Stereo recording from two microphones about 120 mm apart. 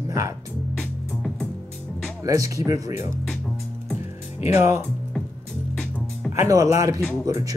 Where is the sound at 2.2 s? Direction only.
30° right (ahead or behind).